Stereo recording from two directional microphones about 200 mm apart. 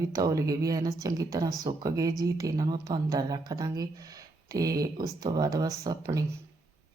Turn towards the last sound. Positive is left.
turn(degrees=-15)  # may be behind; listen again after turning